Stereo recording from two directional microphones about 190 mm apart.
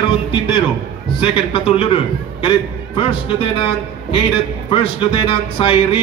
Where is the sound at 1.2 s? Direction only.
25° left (ahead or behind).